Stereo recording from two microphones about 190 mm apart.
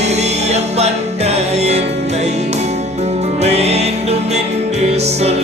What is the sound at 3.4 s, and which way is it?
Music, 35° right (ahead or behind).